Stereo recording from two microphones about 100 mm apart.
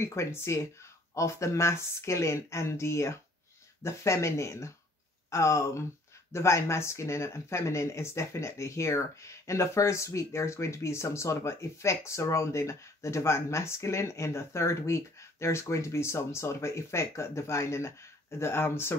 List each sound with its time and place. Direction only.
0.0 s speech: 25° left (ahead or behind)